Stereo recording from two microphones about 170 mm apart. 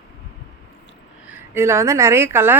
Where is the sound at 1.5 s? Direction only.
15° right (ahead or behind).